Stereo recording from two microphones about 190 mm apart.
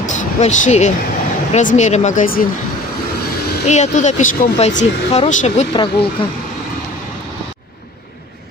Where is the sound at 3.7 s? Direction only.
40° left (ahead or behind).